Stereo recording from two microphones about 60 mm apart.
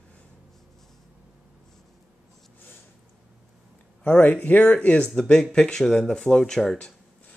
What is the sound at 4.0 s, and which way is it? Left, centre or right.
Speech, left.